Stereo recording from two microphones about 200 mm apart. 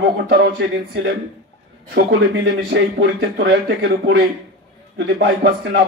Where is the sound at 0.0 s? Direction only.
50° right (ahead or behind).